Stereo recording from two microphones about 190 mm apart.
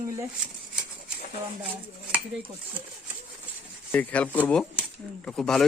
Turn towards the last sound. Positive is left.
turn(degrees=5)  # may be behind; listen again after turning